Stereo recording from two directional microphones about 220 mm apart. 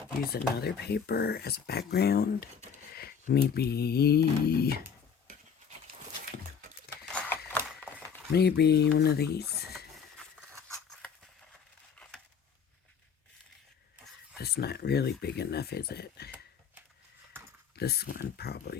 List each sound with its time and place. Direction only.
0.3 s speech: 45° left (ahead or behind)
7.0 s a sound: 5° left (ahead or behind)
8.3 s speech: 50° left (ahead or behind)
14.3 s speech: 45° left (ahead or behind)
17.7 s speech: 45° left (ahead or behind)